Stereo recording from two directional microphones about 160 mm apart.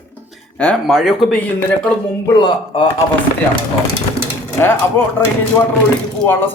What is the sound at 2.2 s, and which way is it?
Speech, 30° left (ahead or behind).